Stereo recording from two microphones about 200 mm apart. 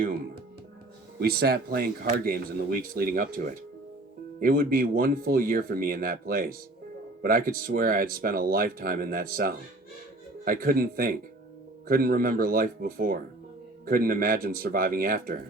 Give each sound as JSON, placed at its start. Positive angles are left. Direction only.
{"t": 1.2, "sound": "speech", "side_deg": -50}